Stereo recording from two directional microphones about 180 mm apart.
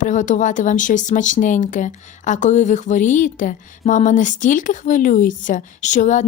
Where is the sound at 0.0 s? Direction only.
45° left (ahead or behind).